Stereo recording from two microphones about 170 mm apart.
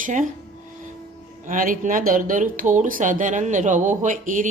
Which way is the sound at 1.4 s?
50° right (ahead or behind).